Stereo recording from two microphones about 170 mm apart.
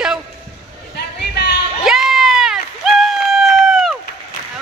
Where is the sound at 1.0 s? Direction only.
80° left.